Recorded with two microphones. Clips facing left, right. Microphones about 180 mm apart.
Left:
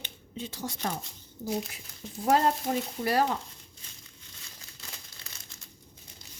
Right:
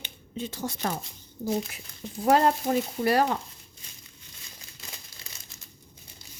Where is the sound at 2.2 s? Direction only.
70° right (ahead or behind).